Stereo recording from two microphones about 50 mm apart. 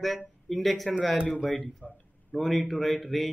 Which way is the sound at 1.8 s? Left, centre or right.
Left.